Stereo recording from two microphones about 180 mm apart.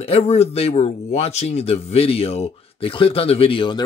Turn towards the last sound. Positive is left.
turn(degrees=25)  # may be behind; listen again after turning